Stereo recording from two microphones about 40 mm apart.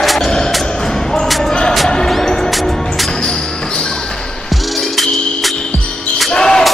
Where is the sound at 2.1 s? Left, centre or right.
Centre.